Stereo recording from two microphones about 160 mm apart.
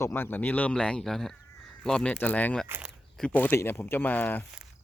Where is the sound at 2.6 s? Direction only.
15° right (ahead or behind).